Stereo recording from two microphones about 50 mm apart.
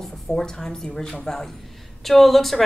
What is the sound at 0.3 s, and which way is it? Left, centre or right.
A woman's voice, centre.